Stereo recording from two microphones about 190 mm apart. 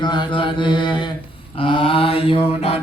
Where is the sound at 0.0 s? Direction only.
25° left (ahead or behind).